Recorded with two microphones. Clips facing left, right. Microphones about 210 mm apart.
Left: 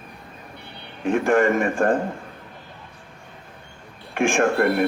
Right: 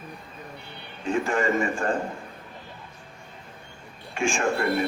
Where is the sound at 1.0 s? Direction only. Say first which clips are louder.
Left 6 dB; 55° left (ahead or behind).